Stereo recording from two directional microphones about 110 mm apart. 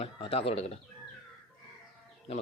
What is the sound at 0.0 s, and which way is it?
Speech, 60° left (ahead or behind).